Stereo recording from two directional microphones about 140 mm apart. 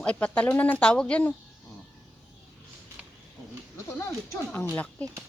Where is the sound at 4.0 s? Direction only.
20° left (ahead or behind).